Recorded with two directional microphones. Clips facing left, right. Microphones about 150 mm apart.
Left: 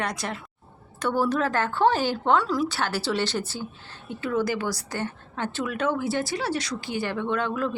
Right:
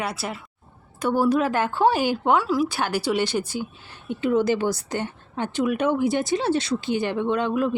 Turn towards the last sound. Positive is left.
turn(degrees=-15)  # may be behind; listen again after turning